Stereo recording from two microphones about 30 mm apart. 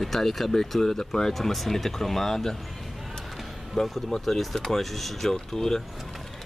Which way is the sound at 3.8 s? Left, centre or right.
Centre.